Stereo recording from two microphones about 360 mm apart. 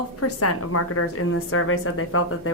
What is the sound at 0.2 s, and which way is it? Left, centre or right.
A woman's voice, left.